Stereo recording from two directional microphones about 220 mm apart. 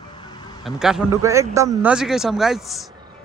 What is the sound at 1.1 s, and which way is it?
A man's voice, 15° right (ahead or behind).